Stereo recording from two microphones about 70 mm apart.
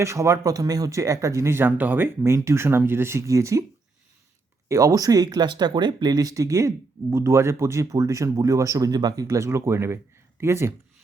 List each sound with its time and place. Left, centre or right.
0.0 s speech: right
4.7 s speech: right
9.2 s speech: right